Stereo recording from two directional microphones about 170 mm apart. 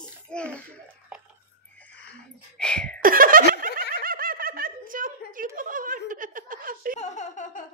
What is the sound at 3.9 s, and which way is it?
Snicker, 55° right (ahead or behind).